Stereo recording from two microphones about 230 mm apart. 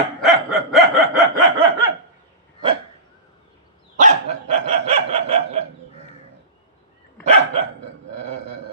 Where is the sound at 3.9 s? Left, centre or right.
Right.